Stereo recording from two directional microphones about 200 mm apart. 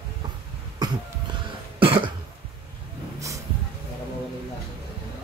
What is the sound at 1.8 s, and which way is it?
Cough, 25° right (ahead or behind).